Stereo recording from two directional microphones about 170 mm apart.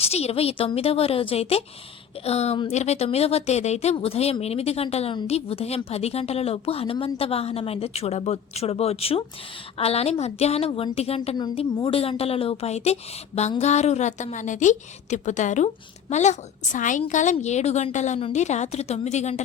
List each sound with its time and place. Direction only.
0.0 s a woman's voice: 35° left (ahead or behind)
11.3 s a woman's voice: 25° left (ahead or behind)